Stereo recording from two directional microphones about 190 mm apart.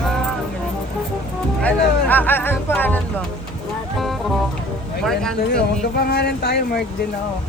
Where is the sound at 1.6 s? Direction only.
10° left (ahead or behind).